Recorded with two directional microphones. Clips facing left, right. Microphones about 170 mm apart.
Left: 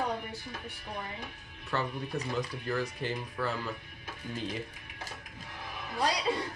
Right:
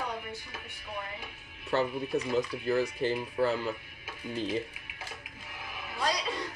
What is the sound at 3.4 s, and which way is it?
Speech, 25° right (ahead or behind).